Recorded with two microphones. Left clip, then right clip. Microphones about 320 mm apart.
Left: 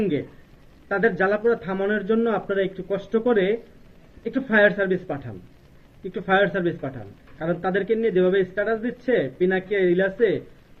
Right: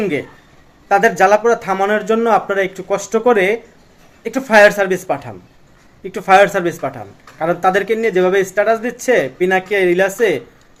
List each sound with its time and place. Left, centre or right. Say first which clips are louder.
0.9 s speech: right 10 dB; right